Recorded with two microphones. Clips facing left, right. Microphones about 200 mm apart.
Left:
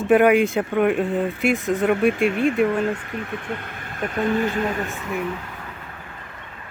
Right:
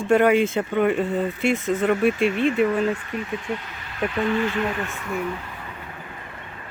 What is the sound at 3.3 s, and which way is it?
Speech, 55° left (ahead or behind).